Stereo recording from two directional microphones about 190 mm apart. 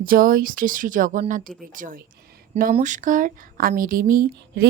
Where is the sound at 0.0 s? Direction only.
50° right (ahead or behind).